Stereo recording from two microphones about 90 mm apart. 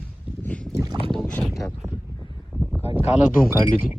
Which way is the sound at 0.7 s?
40° right (ahead or behind).